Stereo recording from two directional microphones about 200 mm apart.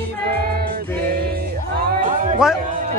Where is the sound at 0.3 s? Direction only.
50° right (ahead or behind).